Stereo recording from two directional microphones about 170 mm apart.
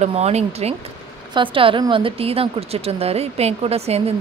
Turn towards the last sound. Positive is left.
turn(degrees=-35)  # may be behind; listen again after turning